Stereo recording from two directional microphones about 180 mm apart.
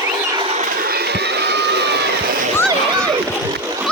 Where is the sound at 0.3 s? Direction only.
35° right (ahead or behind); by 2.0 s 70° right (ahead or behind).